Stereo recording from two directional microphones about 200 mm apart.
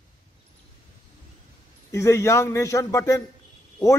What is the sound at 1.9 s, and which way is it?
A man's voice, 15° left (ahead or behind).